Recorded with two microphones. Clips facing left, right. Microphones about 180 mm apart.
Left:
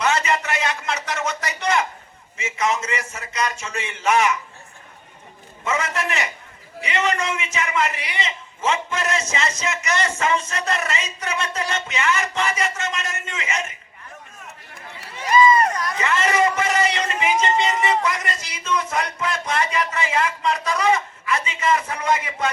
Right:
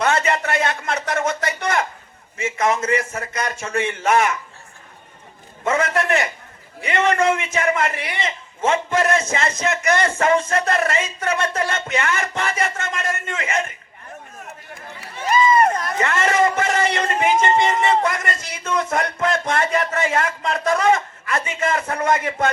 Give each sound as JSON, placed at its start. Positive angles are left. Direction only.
{"t": 0.0, "sound": "a sound", "side_deg": -55}
{"t": 2.4, "sound": "a man's voice", "side_deg": -55}
{"t": 5.6, "sound": "a man's voice", "side_deg": -55}
{"t": 15.8, "sound": "a man's voice", "side_deg": -50}